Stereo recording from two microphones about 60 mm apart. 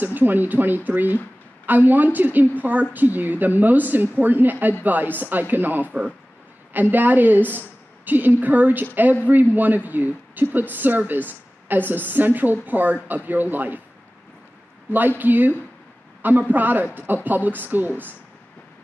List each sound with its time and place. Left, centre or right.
0.0 s a woman's voice: right
14.9 s speech: right